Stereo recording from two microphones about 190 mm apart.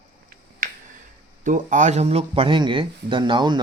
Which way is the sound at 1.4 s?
45° right (ahead or behind).